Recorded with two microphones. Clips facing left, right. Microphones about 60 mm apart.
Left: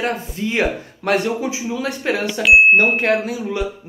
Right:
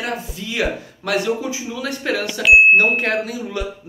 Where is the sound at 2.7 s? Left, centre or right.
Left.